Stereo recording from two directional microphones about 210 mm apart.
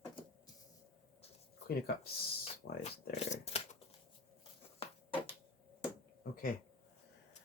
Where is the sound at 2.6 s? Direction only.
50° left (ahead or behind).